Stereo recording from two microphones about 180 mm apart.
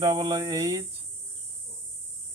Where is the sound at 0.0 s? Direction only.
20° right (ahead or behind).